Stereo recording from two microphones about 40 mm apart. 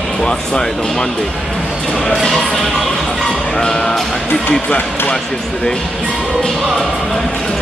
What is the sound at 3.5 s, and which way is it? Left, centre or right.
Speech, centre.